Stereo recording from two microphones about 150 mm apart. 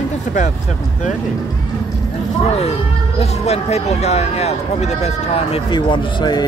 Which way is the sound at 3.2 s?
45° left (ahead or behind).